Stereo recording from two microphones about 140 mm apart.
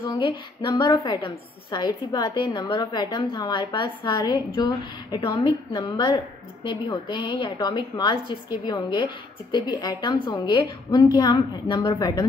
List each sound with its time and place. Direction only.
0.0 s a woman's voice: 35° left (ahead or behind)